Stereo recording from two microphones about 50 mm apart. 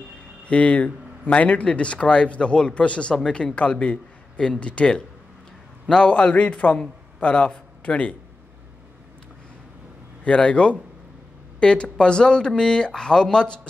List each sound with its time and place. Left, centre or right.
0.5 s speech: left
3.2 s a man's voice: centre
10.2 s speech: left